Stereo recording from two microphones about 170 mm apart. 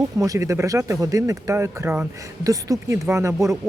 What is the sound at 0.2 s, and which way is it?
Speech, 20° right (ahead or behind).